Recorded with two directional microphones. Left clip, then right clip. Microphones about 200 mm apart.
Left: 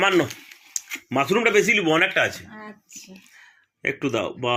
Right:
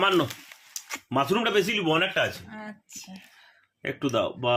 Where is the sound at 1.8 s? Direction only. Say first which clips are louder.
Left 5 dB; 15° left (ahead or behind).